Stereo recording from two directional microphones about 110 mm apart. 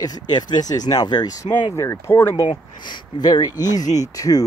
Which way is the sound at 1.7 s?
25° left (ahead or behind).